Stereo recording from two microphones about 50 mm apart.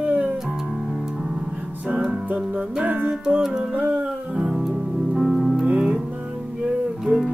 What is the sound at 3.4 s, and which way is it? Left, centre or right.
Music, centre.